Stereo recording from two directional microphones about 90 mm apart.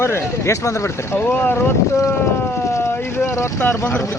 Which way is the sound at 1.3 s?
20° left (ahead or behind).